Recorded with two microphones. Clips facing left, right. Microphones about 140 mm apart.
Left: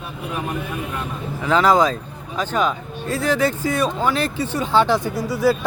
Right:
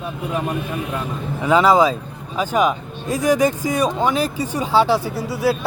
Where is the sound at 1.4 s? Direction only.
5° right (ahead or behind).